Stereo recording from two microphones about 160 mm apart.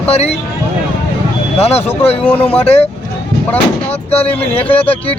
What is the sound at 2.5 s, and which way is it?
Speech, 40° left (ahead or behind).